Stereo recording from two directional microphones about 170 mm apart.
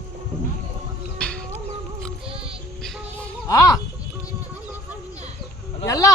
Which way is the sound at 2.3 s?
35° right (ahead or behind).